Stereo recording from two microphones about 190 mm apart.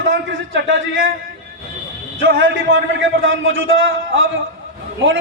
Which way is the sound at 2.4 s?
85° right.